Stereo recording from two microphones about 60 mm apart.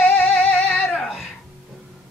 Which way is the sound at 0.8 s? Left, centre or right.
Centre.